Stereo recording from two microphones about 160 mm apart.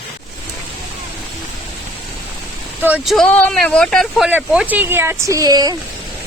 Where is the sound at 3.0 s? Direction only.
Centre (ahead or behind); by 5.8 s 25° right (ahead or behind).